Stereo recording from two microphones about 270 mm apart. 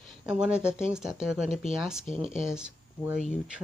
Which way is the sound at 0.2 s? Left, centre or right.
Centre.